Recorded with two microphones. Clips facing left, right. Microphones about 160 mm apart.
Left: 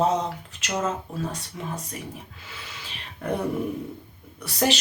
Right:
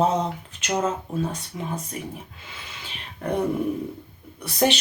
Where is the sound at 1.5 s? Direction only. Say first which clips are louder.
Right 2 dB; 5° right (ahead or behind).